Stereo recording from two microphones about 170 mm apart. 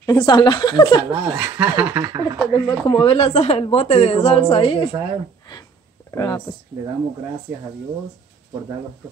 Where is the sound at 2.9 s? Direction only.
30° left (ahead or behind).